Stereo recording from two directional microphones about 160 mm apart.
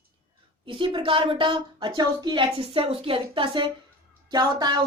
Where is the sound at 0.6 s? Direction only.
30° right (ahead or behind).